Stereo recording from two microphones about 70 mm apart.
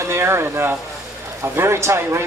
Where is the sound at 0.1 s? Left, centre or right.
Right.